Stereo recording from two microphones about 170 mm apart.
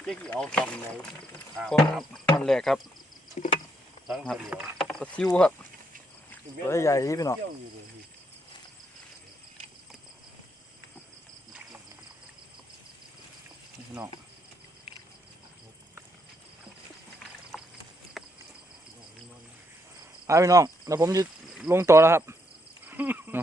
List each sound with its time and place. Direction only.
0.0 s speech: 5° left (ahead or behind)
3.4 s a sound: 45° left (ahead or behind)
4.0 s speech: centre (ahead or behind)
6.3 s speech: 15° left (ahead or behind)
17.5 s clip-clop: centre (ahead or behind)
18.2 s a sound: centre (ahead or behind)
20.2 s cricket: 20° right (ahead or behind)